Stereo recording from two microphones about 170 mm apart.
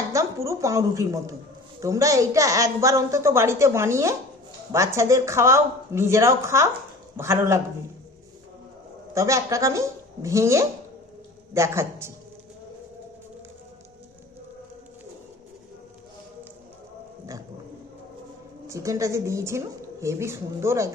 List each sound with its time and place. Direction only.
0.1 s a woman's voice: 20° right (ahead or behind)
9.1 s a woman's voice: 20° right (ahead or behind)
18.7 s a woman's voice: 20° right (ahead or behind)